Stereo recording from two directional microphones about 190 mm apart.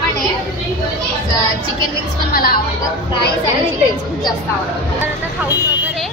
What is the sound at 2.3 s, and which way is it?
Speech, 50° left (ahead or behind).